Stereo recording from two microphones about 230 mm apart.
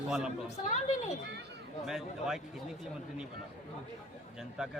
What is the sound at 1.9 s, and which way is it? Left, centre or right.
Speech, centre.